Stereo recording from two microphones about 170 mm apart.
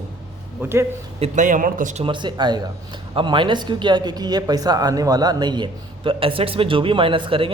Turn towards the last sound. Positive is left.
turn(degrees=-30)  # may be behind; listen again after turning